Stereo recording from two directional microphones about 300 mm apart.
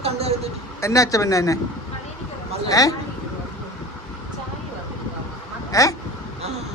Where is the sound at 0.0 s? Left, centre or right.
Right.